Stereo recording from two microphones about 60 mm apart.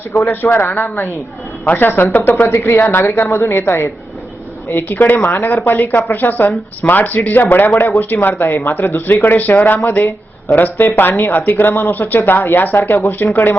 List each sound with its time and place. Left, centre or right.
0.3 s speech: left
2.5 s a woman's voice: left
7.8 s speech: left